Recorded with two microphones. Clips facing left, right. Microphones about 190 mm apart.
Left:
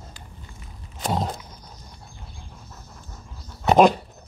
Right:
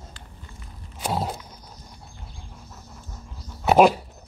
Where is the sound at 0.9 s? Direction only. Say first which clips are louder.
Left 1 dB; 5° right (ahead or behind).